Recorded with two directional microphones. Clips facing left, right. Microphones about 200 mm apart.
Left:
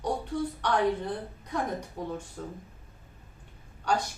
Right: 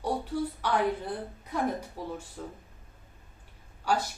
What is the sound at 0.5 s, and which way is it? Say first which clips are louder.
A woman's voice: left 3 dB; 5° right (ahead or behind).